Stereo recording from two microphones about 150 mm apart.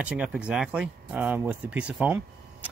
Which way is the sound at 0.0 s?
10° right (ahead or behind).